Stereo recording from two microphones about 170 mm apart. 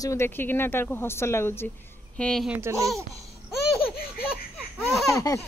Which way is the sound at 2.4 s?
15° right (ahead or behind).